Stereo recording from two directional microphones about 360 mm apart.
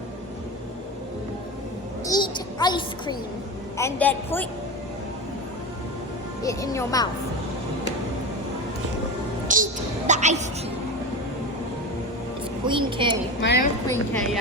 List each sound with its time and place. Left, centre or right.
2.0 s a sound: centre
3.8 s a woman's voice: centre
6.4 s speech: centre
9.5 s a woman's voice: right
12.6 s a woman's voice: centre
13.4 s a woman's voice: left
13.8 s a woman's voice: centre